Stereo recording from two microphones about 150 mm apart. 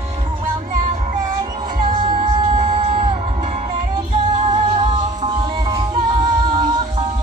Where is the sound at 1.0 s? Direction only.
40° right (ahead or behind).